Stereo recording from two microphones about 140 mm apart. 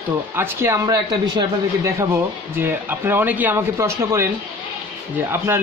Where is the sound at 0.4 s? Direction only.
20° right (ahead or behind).